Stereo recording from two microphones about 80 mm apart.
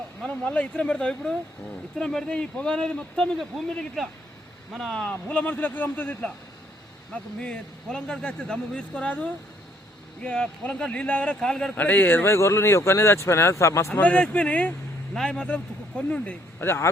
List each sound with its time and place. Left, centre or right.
0.2 s speech: centre
4.7 s speech: centre
5.0 s speech: centre
7.1 s speech: centre
11.8 s speech: left
13.9 s speech: centre
16.6 s speech: left